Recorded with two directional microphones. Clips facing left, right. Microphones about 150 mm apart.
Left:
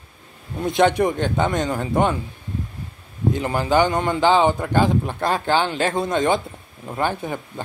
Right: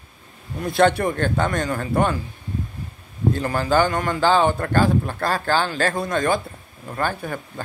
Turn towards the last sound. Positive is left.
turn(degrees=20)  # may be behind; listen again after turning